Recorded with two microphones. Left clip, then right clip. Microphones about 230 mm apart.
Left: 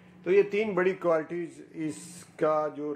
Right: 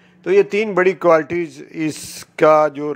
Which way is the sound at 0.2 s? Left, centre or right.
Right.